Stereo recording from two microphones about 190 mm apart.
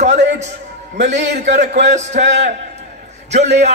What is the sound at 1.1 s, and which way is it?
Speech, 70° right (ahead or behind).